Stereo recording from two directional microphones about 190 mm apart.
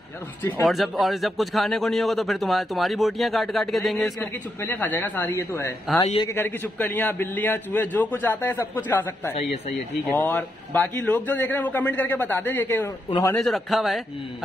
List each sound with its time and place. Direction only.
0.4 s a man's voice: 10° left (ahead or behind)
4.2 s a man's voice: 10° left (ahead or behind)